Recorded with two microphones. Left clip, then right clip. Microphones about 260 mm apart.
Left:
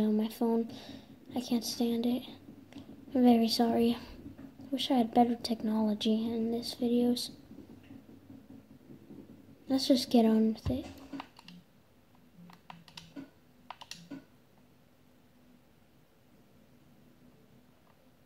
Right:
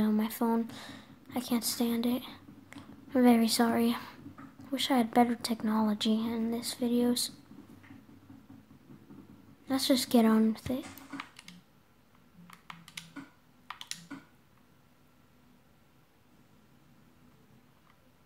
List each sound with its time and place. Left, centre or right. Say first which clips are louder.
0.0 s speech: even; right
9.7 s speech: even; centre